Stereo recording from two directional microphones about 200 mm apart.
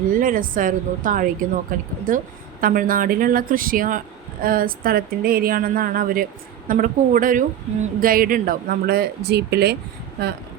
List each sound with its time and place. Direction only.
0.1 s a woman's voice: 45° right (ahead or behind)